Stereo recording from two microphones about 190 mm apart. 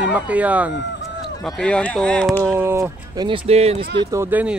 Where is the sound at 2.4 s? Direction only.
15° right (ahead or behind).